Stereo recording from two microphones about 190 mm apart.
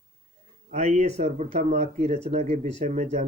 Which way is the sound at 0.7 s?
35° right (ahead or behind).